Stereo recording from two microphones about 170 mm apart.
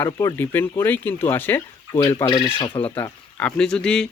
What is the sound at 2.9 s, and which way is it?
Speech, 10° left (ahead or behind).